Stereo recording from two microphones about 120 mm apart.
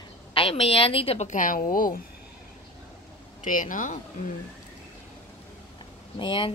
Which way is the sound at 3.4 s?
90° left.